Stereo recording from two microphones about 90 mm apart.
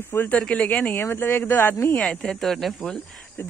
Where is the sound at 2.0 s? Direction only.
10° left (ahead or behind).